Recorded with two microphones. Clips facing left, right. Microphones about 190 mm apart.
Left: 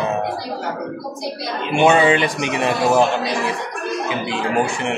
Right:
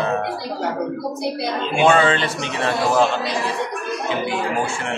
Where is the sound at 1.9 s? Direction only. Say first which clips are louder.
Left 2 dB; 15° left (ahead or behind).